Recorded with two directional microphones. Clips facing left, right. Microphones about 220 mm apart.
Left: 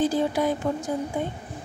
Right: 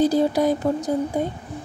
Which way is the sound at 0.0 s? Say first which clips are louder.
Right 5 dB; 40° right (ahead or behind).